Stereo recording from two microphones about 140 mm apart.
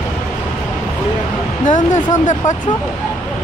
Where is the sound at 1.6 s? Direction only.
60° left (ahead or behind).